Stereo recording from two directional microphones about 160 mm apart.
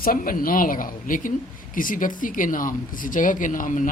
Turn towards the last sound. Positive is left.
turn(degrees=55)  # may be behind; listen again after turning